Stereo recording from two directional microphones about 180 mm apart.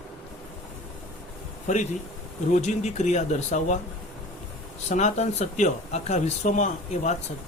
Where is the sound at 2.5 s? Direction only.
40° left (ahead or behind).